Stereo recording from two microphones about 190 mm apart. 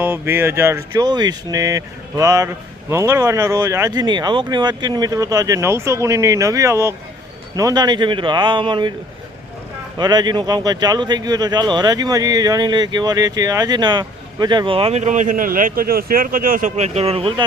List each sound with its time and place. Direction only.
0.0 s speech: 10° right (ahead or behind)
10.0 s speech: 20° right (ahead or behind)